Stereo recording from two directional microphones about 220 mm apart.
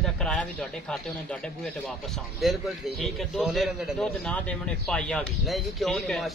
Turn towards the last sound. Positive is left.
turn(degrees=0)  # may be behind; listen again after turning